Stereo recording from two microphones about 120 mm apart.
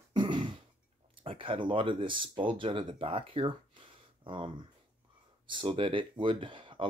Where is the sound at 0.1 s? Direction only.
40° right (ahead or behind).